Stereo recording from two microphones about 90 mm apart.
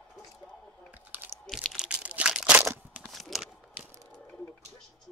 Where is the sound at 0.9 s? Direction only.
20° right (ahead or behind).